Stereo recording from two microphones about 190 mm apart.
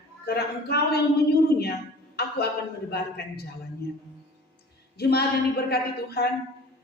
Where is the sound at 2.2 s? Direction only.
55° left (ahead or behind).